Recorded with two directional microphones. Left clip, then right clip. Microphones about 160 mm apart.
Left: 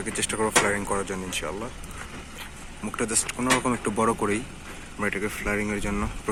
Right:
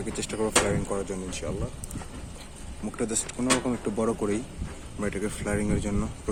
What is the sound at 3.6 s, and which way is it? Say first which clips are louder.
Speech: left 4 dB; centre (ahead or behind).